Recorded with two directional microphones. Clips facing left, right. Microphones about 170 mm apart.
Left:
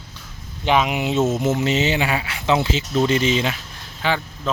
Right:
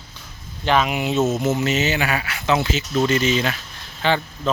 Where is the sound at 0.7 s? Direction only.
15° left (ahead or behind).